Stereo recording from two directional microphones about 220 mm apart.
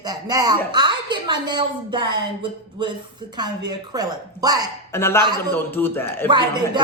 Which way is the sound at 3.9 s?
15° right (ahead or behind).